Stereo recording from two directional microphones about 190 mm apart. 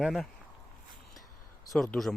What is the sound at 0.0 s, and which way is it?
Speech, centre (ahead or behind).